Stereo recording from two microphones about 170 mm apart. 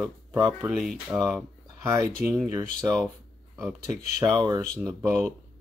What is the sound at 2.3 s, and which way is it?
Speech, 15° right (ahead or behind).